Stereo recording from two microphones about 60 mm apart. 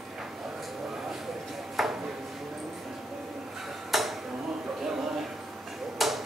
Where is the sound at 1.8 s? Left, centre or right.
Centre.